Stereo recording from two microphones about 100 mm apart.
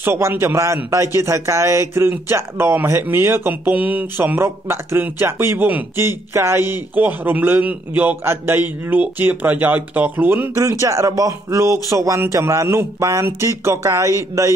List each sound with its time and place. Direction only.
0.0 s speech: 25° right (ahead or behind)